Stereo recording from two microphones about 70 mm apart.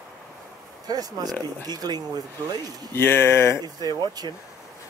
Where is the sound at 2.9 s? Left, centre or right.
Left.